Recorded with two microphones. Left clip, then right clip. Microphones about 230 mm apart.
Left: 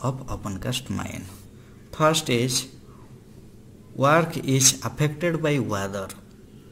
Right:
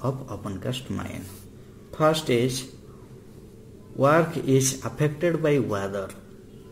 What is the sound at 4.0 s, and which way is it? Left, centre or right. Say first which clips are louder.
A man's voice: even; left.